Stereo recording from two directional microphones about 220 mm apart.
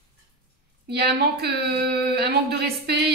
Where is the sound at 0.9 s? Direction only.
45° right (ahead or behind).